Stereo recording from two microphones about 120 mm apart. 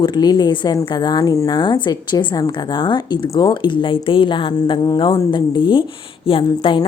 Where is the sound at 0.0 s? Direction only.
35° left (ahead or behind).